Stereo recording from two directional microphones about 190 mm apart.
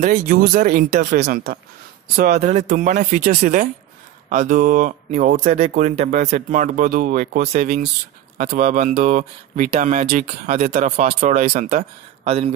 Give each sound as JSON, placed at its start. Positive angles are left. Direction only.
{"t": 0.0, "sound": "speech", "side_deg": -45}
{"t": 2.3, "sound": "speech", "side_deg": -35}
{"t": 12.3, "sound": "speech", "side_deg": -30}